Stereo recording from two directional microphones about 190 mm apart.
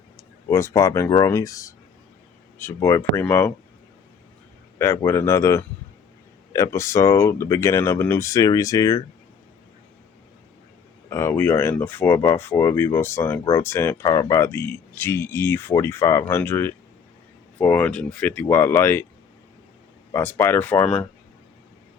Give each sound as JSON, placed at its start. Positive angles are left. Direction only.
{"t": 0.4, "sound": "speech", "side_deg": 15}
{"t": 4.8, "sound": "speech", "side_deg": 15}
{"t": 11.1, "sound": "speech", "side_deg": 15}
{"t": 20.1, "sound": "speech", "side_deg": 10}